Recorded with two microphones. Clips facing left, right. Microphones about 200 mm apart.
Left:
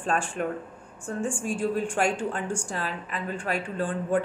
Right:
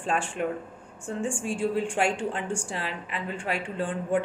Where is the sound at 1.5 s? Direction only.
30° right (ahead or behind).